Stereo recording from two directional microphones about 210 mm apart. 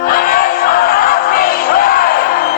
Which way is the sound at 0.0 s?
45° left (ahead or behind).